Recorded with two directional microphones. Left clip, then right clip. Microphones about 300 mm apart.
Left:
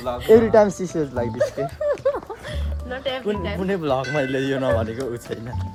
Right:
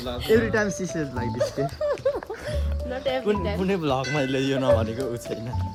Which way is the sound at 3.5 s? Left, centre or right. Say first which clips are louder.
Left 2 dB; centre.